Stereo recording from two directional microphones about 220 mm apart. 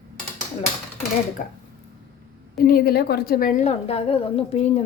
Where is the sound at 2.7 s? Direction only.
45° left (ahead or behind).